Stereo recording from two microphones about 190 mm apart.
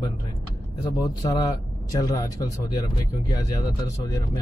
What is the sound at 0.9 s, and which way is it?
Speech, 20° left (ahead or behind).